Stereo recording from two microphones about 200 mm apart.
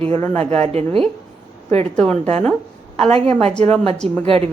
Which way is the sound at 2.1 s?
35° right (ahead or behind).